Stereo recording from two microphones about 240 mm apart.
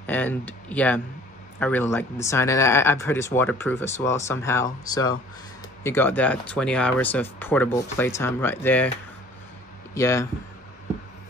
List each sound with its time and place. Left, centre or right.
0.0 s speech: centre
9.9 s speech: centre